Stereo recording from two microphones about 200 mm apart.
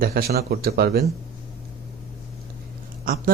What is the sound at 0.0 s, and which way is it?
Speech, 50° right (ahead or behind).